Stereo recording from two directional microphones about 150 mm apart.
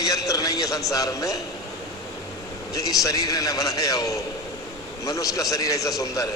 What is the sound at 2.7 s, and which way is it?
A man's voice, 25° left (ahead or behind).